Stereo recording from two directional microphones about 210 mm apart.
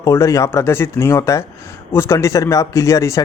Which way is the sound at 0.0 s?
15° left (ahead or behind).